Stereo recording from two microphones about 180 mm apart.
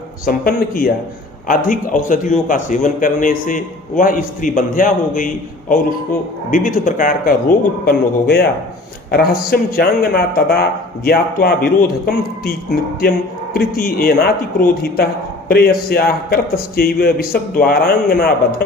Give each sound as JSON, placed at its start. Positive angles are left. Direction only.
{"t": 0.3, "sound": "a man's voice", "side_deg": 55}
{"t": 7.9, "sound": "a man's voice", "side_deg": 60}
{"t": 15.4, "sound": "a man's voice", "side_deg": 55}